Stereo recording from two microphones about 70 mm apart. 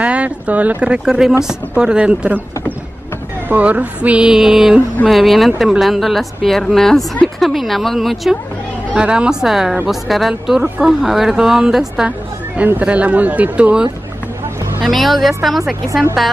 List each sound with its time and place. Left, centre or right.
0.0 s a woman's voice: centre
3.4 s speech: right
4.3 s a woman's voice: centre
8.9 s a woman's voice: centre
12.5 s speech: right
14.9 s speech: centre